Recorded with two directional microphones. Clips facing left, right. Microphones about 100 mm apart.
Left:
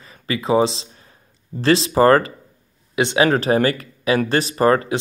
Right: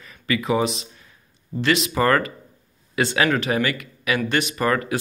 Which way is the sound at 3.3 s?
35° left (ahead or behind).